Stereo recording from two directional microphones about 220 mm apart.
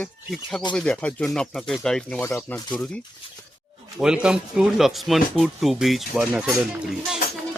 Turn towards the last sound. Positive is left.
turn(degrees=0)  # may be behind; listen again after turning